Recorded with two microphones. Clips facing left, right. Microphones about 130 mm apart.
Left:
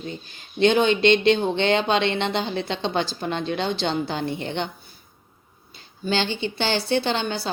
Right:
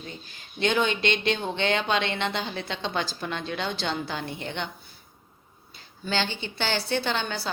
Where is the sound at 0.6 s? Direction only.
25° left (ahead or behind).